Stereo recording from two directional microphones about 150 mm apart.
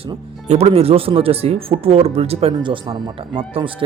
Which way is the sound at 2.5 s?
30° right (ahead or behind).